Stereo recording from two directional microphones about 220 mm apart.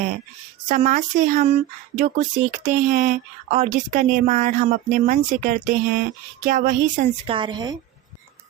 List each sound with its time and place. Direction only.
0.7 s speech: 35° right (ahead or behind)
7.3 s a woman's voice: 20° right (ahead or behind)